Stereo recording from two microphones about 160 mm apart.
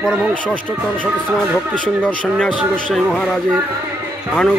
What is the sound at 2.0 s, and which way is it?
Speech, 5° left (ahead or behind).